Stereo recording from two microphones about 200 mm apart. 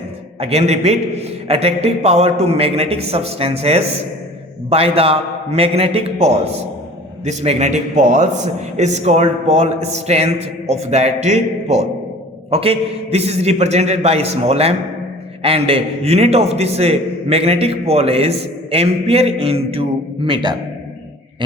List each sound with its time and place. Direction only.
0.3 s a man's voice: 30° right (ahead or behind)